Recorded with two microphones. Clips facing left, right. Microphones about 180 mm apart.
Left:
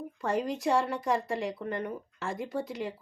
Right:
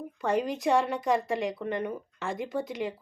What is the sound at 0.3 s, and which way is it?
A woman's voice, 20° right (ahead or behind).